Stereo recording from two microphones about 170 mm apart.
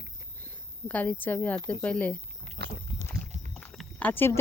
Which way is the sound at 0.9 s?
10° left (ahead or behind).